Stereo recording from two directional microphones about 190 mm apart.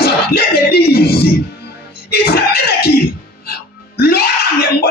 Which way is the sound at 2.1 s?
55° left (ahead or behind).